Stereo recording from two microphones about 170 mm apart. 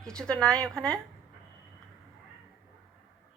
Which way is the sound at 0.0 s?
5° left (ahead or behind).